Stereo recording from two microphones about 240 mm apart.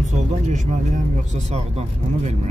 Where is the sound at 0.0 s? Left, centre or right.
Right.